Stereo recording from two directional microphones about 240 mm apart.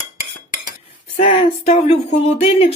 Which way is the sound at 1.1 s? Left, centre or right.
Left.